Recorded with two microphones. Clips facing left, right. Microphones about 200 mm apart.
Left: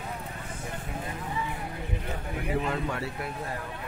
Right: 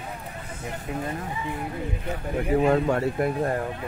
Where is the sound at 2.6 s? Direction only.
50° right (ahead or behind).